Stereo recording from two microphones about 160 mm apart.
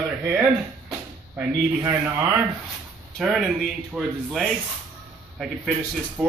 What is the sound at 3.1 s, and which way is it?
Speech, 5° right (ahead or behind).